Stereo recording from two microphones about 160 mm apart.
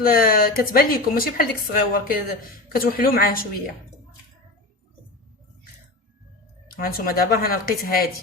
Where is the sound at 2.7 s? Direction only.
65° left (ahead or behind).